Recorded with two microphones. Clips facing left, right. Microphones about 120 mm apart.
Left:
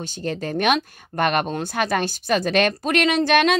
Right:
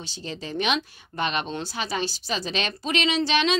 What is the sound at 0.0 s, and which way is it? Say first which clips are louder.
Speech: left 8 dB; 50° left (ahead or behind).